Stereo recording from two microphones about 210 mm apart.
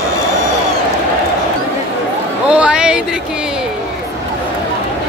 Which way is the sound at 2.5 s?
5° right (ahead or behind).